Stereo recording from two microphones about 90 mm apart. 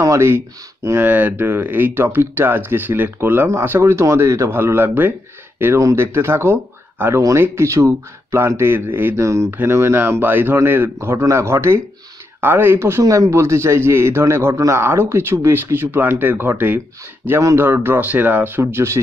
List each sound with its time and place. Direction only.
0.0 s speech: 30° right (ahead or behind)
13.0 s speech: 40° right (ahead or behind); by 16.8 s 20° right (ahead or behind)
17.4 s speech: 35° right (ahead or behind)
17.6 s speech: 25° right (ahead or behind)